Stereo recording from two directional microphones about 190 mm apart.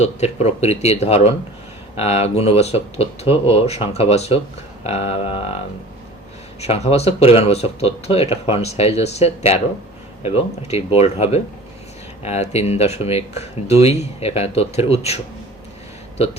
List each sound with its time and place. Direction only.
0.0 s speech: 35° left (ahead or behind)
6.6 s speech: 35° left (ahead or behind)